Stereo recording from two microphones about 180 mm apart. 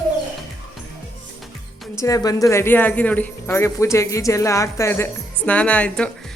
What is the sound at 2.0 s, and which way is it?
A woman's voice, 20° left (ahead or behind).